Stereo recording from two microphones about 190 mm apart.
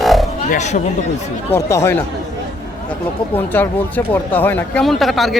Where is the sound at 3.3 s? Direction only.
10° left (ahead or behind).